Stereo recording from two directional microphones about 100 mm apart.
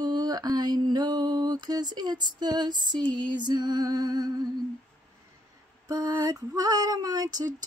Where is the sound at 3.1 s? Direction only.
50° right (ahead or behind).